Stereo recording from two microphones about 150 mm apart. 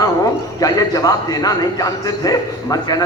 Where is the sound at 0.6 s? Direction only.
25° left (ahead or behind).